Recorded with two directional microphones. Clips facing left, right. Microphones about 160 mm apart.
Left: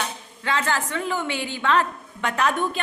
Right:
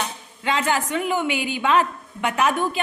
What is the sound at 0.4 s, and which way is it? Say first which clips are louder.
A woman's voice: right 2 dB; 15° right (ahead or behind).